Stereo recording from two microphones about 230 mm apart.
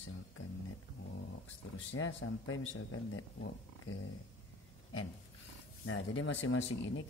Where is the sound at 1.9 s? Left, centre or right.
Left.